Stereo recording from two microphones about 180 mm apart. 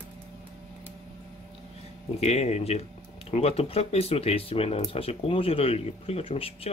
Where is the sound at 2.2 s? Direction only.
35° left (ahead or behind).